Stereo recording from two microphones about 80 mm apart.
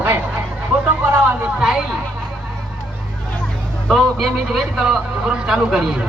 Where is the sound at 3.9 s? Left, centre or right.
Centre.